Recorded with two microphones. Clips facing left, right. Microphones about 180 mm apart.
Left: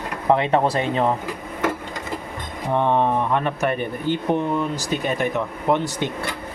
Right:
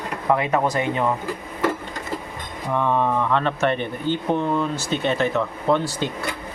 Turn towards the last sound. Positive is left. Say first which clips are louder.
# even
turn(degrees=20)  # may be behind; listen again after turning